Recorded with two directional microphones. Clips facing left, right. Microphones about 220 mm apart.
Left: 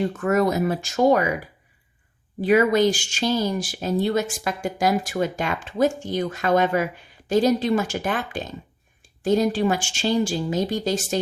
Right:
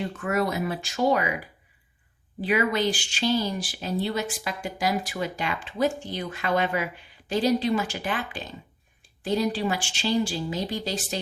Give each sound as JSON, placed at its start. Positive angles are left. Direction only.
{"t": 0.0, "sound": "speech", "side_deg": 45}
{"t": 2.4, "sound": "speech", "side_deg": 45}